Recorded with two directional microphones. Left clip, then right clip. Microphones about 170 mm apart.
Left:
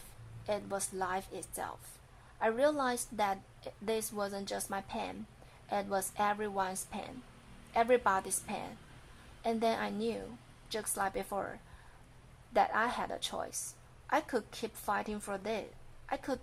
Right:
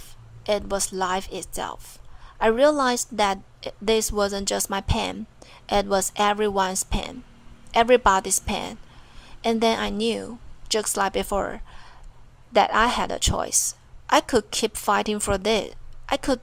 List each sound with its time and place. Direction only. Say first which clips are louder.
0.4 s a woman's voice: right 12 dB; 20° right (ahead or behind)